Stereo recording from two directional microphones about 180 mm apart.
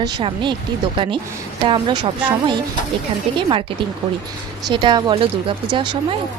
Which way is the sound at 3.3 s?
25° right (ahead or behind).